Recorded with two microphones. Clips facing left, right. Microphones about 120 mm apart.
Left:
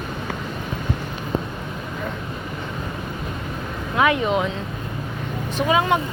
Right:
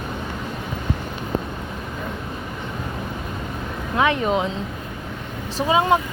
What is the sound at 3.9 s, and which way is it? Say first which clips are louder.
Speech: left 1 dB; 30° right (ahead or behind).